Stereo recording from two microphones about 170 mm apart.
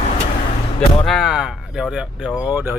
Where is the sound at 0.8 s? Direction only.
Centre (ahead or behind).